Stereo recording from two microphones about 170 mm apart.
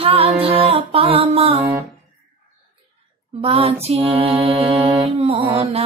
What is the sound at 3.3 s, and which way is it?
Music, 35° right (ahead or behind).